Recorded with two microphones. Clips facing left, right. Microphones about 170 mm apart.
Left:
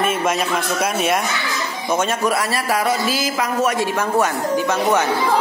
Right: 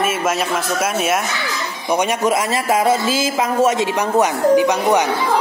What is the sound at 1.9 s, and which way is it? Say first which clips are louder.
A man's voice: right 2 dB; 15° right (ahead or behind).